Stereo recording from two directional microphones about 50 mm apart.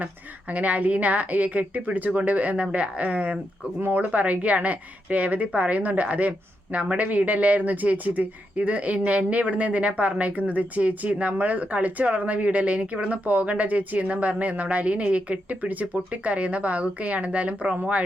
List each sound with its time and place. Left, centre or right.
0.0 s a woman's voice: right